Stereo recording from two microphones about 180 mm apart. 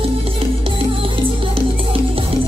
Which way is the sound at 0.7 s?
30° right (ahead or behind).